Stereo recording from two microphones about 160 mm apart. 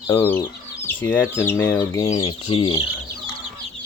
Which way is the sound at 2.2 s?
35° left (ahead or behind).